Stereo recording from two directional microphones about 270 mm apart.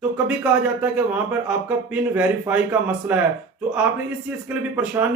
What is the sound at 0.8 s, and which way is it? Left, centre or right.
Speech, centre.